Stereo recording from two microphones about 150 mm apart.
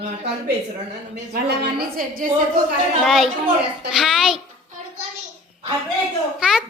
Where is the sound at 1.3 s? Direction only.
90° right; by 2.3 s 70° right (ahead or behind).